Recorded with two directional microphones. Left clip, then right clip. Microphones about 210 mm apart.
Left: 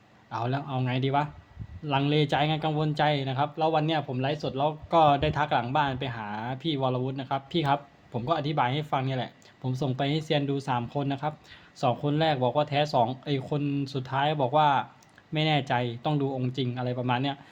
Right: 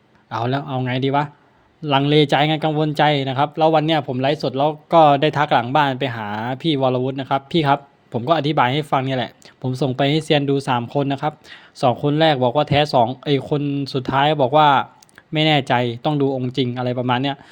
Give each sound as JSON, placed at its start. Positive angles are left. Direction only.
{"t": 0.3, "sound": "speech", "side_deg": -35}